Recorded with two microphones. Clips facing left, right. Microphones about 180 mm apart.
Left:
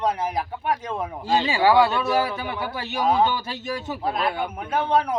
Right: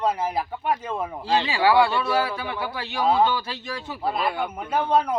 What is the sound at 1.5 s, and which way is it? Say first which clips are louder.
Speech: left 1 dB; 20° left (ahead or behind).